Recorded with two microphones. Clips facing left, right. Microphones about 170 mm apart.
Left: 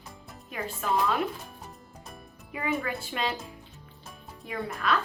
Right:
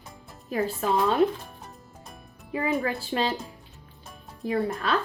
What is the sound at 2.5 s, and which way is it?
Speech, 35° right (ahead or behind).